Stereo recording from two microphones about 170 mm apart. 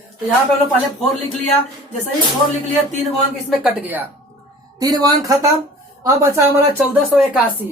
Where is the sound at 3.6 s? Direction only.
10° right (ahead or behind).